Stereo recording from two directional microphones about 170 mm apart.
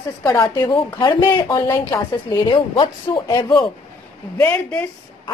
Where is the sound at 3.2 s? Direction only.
20° left (ahead or behind).